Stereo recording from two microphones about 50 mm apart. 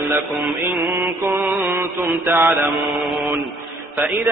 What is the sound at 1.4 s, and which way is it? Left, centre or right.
Mantra, right.